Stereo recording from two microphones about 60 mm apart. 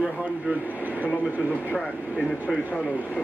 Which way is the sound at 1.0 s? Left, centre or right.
Right.